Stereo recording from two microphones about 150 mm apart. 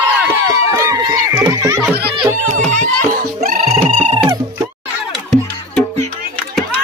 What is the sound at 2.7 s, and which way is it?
Music, 55° right (ahead or behind).